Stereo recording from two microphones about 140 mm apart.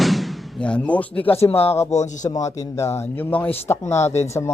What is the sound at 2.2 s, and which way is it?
Speech, 25° left (ahead or behind).